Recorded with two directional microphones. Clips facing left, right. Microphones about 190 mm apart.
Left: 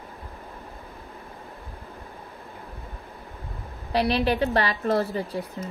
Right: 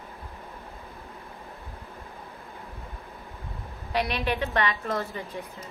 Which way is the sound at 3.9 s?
30° left (ahead or behind).